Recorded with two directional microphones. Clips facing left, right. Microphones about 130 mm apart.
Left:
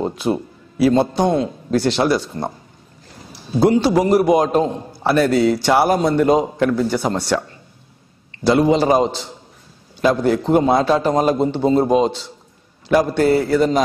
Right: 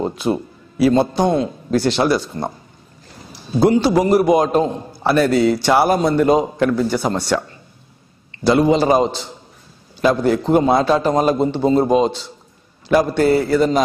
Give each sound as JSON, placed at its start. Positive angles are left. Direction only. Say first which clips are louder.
{"t": 0.0, "sound": "a sound", "louder": "even", "side_deg": -15}
{"t": 0.8, "sound": "a man's voice", "louder": "even", "side_deg": -10}
{"t": 3.6, "sound": "a man's voice", "louder": "even", "side_deg": -15}
{"t": 8.5, "sound": "a man's voice", "louder": "even", "side_deg": -10}